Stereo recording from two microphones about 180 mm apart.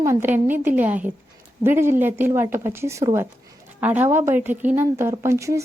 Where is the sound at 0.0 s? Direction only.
15° right (ahead or behind).